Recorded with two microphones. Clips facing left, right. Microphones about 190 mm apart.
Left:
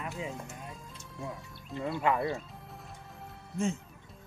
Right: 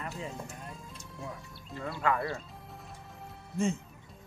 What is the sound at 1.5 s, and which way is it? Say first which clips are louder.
Speech: left 6 dB; 20° left (ahead or behind).